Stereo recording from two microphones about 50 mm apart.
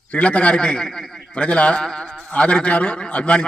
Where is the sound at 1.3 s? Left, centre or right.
Left.